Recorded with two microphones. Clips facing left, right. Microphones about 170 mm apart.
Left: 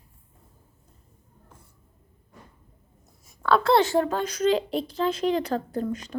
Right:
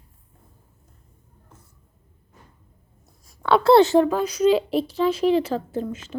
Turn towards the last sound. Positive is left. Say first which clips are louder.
# right 4 dB
turn(degrees=-5)  # may be behind; listen again after turning